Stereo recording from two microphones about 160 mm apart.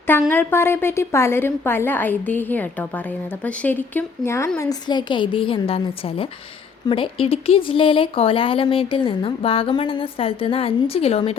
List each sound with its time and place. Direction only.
0.3 s a woman's voice: 15° left (ahead or behind); by 11.3 s 40° left (ahead or behind)